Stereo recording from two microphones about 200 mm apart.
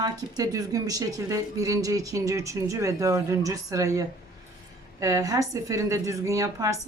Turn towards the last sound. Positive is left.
turn(degrees=-15)  # may be behind; listen again after turning